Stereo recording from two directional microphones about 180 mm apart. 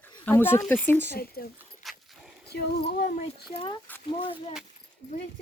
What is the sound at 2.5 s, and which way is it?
Female singing, 60° left (ahead or behind).